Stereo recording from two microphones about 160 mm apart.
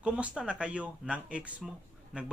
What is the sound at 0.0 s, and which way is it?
Speech, 5° right (ahead or behind).